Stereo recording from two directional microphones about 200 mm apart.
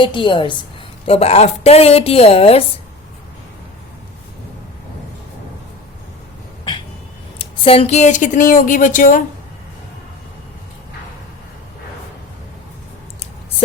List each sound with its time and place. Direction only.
0.0 s a woman's voice: 25° left (ahead or behind)
7.3 s a woman's voice: 30° left (ahead or behind)